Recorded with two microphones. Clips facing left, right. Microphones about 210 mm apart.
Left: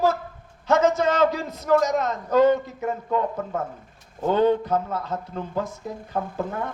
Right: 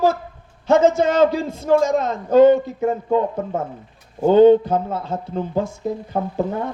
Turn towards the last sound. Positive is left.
turn(degrees=-25)  # may be behind; listen again after turning